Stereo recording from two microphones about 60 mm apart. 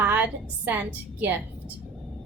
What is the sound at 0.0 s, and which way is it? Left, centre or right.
A woman's voice, right.